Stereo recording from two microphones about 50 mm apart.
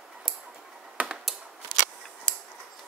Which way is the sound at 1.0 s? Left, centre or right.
Right.